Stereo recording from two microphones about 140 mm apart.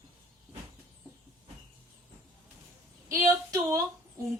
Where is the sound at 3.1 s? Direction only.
20° right (ahead or behind).